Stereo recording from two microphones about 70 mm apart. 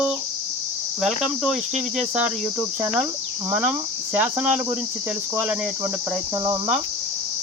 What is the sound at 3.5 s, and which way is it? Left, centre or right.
Speech, right.